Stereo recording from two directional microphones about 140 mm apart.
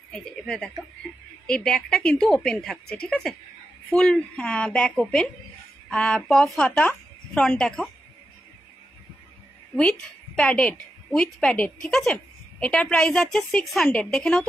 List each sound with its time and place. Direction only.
0.1 s a woman's voice: 5° left (ahead or behind)
6.8 s a sound: 15° left (ahead or behind)
7.4 s a woman's voice: 5° left (ahead or behind)
9.8 s a woman's voice: 5° left (ahead or behind)